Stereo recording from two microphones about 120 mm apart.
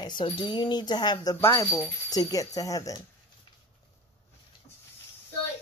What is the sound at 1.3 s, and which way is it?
Speech, 20° left (ahead or behind).